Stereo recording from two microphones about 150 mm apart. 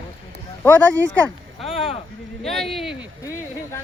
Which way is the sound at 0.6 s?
10° left (ahead or behind).